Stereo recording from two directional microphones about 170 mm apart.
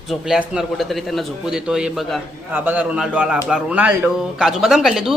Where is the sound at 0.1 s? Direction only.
5° right (ahead or behind).